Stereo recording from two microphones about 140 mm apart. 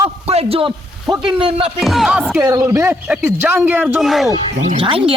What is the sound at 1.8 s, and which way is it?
Speech, centre (ahead or behind).